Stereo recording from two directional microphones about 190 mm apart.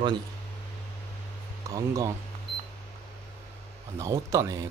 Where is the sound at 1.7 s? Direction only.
20° right (ahead or behind).